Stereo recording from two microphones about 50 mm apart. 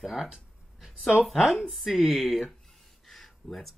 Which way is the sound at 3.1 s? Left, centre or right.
Centre.